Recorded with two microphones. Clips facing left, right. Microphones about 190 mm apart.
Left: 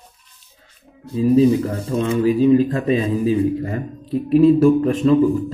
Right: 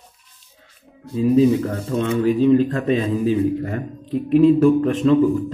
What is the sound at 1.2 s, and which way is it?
Speech, centre (ahead or behind).